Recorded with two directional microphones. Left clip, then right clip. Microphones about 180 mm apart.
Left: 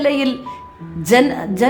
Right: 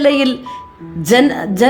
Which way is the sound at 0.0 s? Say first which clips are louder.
Right 4 dB; 15° right (ahead or behind).